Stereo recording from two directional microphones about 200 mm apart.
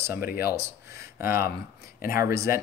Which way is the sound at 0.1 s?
50° left (ahead or behind).